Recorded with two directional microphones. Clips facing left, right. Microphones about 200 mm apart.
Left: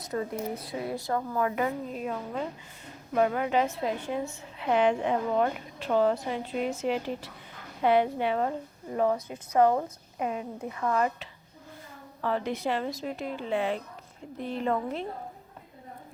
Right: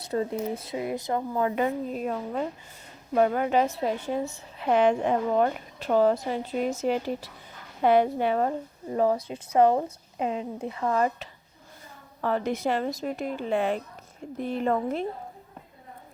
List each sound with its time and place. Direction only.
0.0 s a sound: 30° right (ahead or behind)
0.6 s a woman's voice: 20° right (ahead or behind)
1.9 s a woman's voice: 45° right (ahead or behind)
12.2 s a woman's voice: 45° right (ahead or behind)